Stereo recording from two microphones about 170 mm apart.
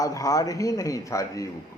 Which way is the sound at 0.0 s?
20° left (ahead or behind).